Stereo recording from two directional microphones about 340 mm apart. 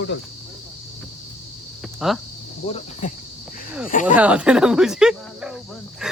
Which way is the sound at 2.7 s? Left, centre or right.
Centre.